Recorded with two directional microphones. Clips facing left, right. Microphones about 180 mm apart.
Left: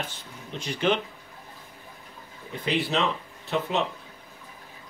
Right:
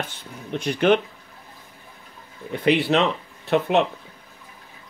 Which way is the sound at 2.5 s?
65° right (ahead or behind).